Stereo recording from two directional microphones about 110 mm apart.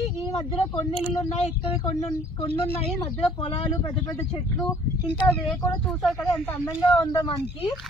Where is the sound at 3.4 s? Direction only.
55° left (ahead or behind).